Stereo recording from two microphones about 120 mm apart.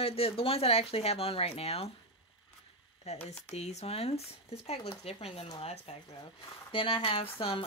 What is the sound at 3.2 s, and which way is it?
Speech, 65° left (ahead or behind).